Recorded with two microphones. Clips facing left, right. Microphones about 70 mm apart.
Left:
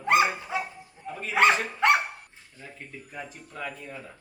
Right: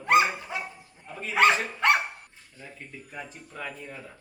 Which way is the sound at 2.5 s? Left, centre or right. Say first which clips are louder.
Left 1 dB; centre.